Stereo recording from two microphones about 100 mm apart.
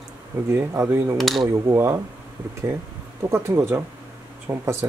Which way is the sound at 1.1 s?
Centre (ahead or behind).